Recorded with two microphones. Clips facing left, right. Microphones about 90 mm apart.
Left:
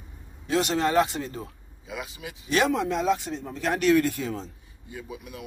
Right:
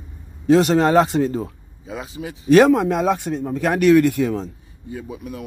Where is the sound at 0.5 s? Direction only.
35° right (ahead or behind); by 4.3 s 70° right (ahead or behind).